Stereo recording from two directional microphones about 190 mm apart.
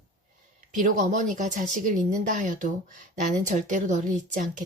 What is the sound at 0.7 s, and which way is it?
Speech, 40° right (ahead or behind).